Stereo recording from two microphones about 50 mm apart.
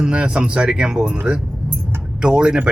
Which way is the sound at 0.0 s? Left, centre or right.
Centre.